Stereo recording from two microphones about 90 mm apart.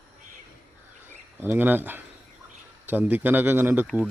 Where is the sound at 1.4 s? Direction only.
25° right (ahead or behind).